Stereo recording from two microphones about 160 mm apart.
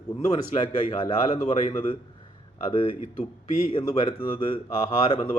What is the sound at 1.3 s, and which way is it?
Speech, 45° left (ahead or behind).